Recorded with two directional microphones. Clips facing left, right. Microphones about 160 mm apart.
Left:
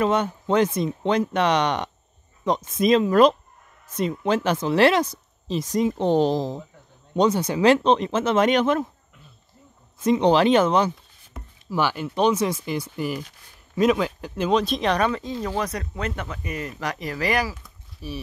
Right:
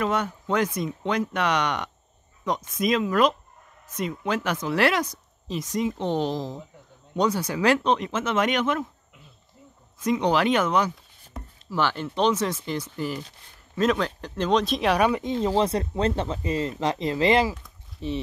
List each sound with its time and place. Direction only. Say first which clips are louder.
0.0 s speech: left 4 dB; 25° left (ahead or behind)
7.2 s speech: left 4 dB; 20° left (ahead or behind)
9.9 s speech: left 4 dB; 30° left (ahead or behind)
11.3 s chopping: left 2 dB; 10° left (ahead or behind)
12.2 s speech: left 2 dB; 10° left (ahead or behind); by 18.2 s 25° right (ahead or behind)